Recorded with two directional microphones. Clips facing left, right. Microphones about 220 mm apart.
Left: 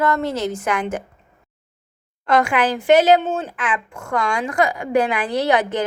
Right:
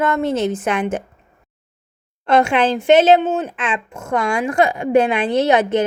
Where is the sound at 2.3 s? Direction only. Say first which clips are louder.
Right 3 dB; 25° right (ahead or behind).